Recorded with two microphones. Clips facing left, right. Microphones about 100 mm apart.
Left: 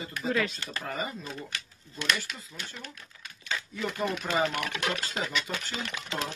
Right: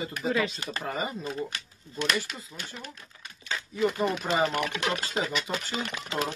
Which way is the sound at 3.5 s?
Centre (ahead or behind).